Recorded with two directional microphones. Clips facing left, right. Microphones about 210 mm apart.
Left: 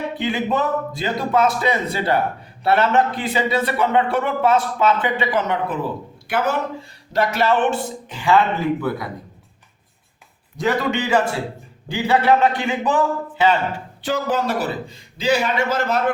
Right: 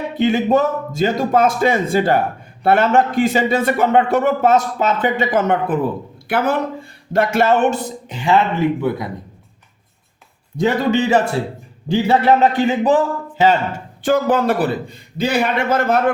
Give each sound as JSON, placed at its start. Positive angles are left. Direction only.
{"t": 0.2, "sound": "a man's voice", "side_deg": -40}
{"t": 8.1, "sound": "speech", "side_deg": -25}
{"t": 10.6, "sound": "speech", "side_deg": -30}
{"t": 12.4, "sound": "speech", "side_deg": -35}